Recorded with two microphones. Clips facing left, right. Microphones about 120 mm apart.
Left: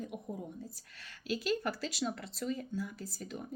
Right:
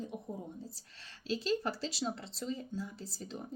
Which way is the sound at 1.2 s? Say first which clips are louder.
Even; 30° right (ahead or behind).